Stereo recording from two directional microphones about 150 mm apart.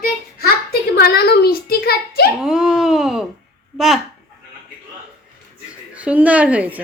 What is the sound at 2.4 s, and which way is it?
Wail, 5° right (ahead or behind).